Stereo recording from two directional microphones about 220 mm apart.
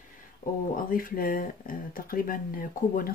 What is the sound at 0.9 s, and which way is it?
Speech, 40° left (ahead or behind).